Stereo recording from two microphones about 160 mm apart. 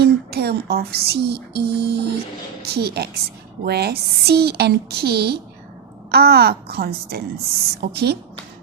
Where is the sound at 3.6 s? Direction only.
90° right.